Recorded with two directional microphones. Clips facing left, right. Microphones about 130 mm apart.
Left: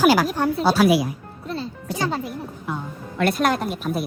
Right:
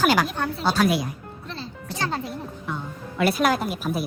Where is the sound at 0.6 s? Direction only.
5° left (ahead or behind).